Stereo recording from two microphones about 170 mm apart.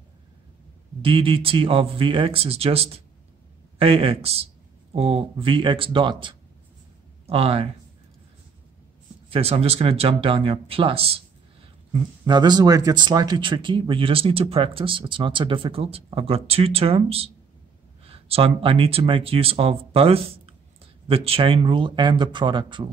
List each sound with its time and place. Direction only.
1.0 s speech: 30° right (ahead or behind)
9.3 s speech: 35° right (ahead or behind)